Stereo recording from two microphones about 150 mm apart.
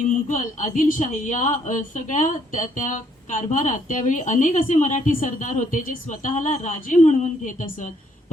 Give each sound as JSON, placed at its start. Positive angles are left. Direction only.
{"t": 0.3, "sound": "a woman's voice", "side_deg": 60}